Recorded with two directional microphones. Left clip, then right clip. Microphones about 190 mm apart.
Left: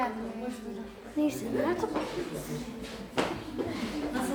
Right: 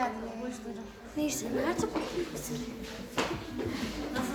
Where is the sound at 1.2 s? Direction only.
15° right (ahead or behind).